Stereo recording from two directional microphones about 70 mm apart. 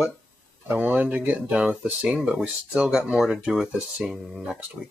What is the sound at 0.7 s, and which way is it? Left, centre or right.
Speech, right.